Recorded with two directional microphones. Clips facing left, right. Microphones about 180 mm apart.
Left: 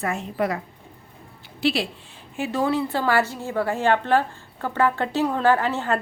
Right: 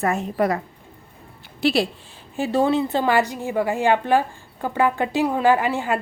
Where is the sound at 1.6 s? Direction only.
40° right (ahead or behind).